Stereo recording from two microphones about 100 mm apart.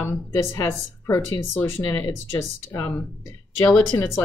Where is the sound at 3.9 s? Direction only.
45° left (ahead or behind).